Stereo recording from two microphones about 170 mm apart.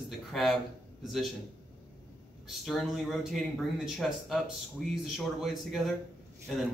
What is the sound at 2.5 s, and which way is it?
Speech, centre (ahead or behind).